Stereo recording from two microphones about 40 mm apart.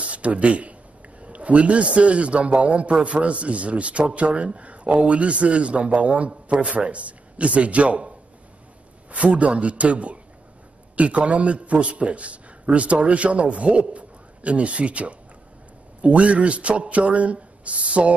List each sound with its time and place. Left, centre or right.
0.0 s a sound: right
1.2 s a man's voice: right
9.1 s a man's voice: right